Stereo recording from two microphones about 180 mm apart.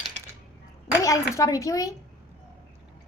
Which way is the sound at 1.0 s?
20° left (ahead or behind).